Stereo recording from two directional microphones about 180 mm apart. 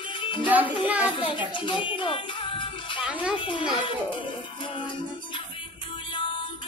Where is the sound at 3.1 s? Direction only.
5° right (ahead or behind).